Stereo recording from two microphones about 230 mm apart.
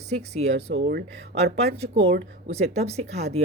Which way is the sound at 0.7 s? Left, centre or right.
Right.